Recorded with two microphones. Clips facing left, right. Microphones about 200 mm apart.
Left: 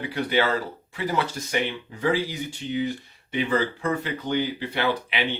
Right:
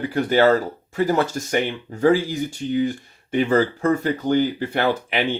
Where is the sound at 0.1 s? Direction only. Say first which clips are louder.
Right 7 dB; 45° right (ahead or behind).